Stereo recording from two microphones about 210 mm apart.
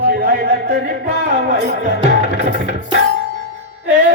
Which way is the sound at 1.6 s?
35° right (ahead or behind).